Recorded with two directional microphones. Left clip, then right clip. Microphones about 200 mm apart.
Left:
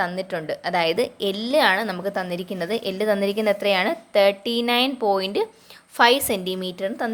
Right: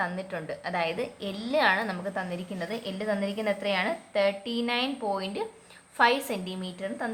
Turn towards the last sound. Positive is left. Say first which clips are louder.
# left 8 dB
turn(degrees=40)  # may be behind; listen again after turning